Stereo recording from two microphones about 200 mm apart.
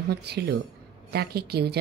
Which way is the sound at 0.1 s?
55° right (ahead or behind).